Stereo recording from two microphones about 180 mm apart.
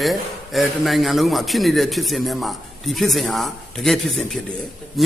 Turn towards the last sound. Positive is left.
turn(degrees=0)  # may be behind; listen again after turning